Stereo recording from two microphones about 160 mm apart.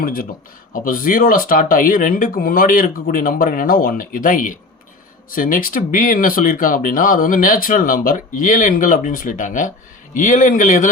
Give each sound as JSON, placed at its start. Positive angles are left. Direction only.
{"t": 0.0, "sound": "a man's voice", "side_deg": 60}